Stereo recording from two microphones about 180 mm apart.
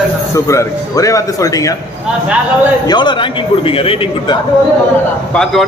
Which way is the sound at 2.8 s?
25° left (ahead or behind).